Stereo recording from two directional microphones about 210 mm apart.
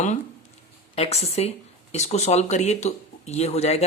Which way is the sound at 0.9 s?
30° left (ahead or behind).